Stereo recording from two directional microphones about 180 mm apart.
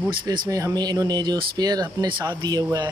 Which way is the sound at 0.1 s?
25° right (ahead or behind).